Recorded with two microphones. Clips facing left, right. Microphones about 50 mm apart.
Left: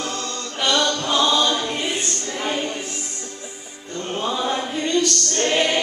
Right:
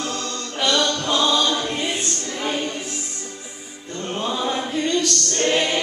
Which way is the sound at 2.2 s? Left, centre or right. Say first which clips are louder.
Even; centre.